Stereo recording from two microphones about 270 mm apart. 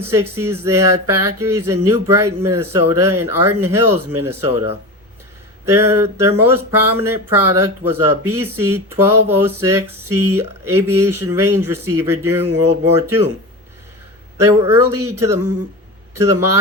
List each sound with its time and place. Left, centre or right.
0.0 s speech: centre
14.3 s speech: centre